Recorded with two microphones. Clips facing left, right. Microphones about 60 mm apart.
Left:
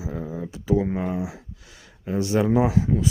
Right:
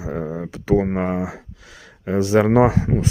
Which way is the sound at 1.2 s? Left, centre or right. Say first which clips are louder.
Right 4 dB; right.